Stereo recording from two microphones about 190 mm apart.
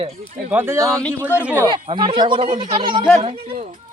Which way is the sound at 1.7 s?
25° right (ahead or behind).